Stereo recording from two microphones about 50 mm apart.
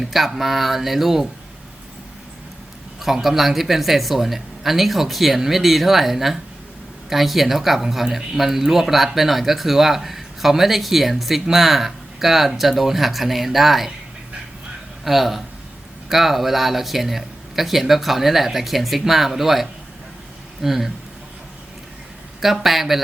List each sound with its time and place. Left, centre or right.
0.0 s speech: centre
3.0 s speech: centre
15.0 s speech: centre
22.4 s speech: centre